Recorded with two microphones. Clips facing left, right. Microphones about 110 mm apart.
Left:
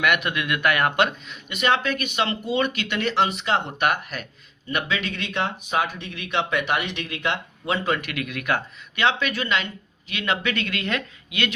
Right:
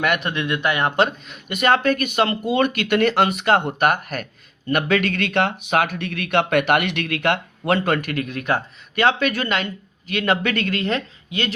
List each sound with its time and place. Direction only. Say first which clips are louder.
0.0 s speech: right 1 dB; 35° right (ahead or behind)
1.3 s speech: right 4 dB; 45° right (ahead or behind)